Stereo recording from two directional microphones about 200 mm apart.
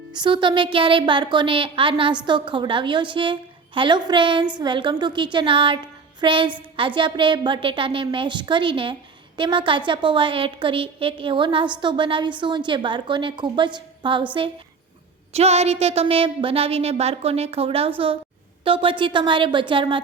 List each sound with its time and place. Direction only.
0.1 s a woman's voice: 25° right (ahead or behind)
15.3 s a woman's voice: 30° right (ahead or behind)